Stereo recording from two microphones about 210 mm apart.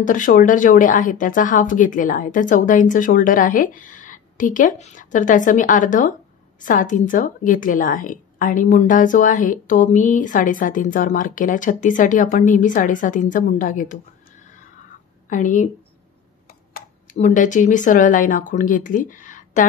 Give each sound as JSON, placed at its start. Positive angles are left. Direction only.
{"t": 0.0, "sound": "a woman's voice", "side_deg": 40}
{"t": 15.2, "sound": "a woman's voice", "side_deg": 40}